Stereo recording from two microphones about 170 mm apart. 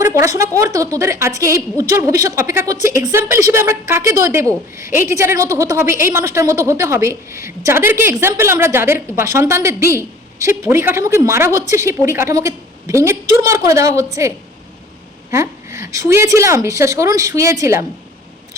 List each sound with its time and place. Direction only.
0.3 s a woman's voice: 20° right (ahead or behind)